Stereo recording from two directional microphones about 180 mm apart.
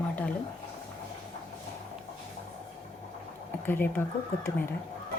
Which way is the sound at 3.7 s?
10° left (ahead or behind).